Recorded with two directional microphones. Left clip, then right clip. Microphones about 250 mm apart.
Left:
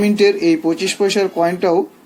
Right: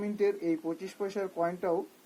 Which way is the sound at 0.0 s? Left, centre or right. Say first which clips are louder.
Left 16 dB; centre.